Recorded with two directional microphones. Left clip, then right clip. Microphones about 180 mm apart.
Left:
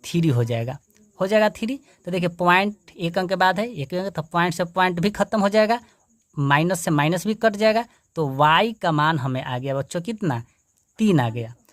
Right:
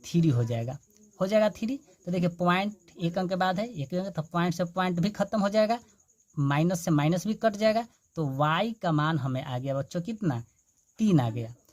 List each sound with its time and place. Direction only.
0.0 s speech: 30° left (ahead or behind)